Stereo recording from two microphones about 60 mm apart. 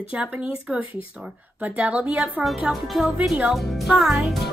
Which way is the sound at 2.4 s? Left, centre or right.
Centre.